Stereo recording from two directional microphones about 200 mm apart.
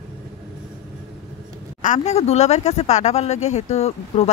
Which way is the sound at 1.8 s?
35° left (ahead or behind).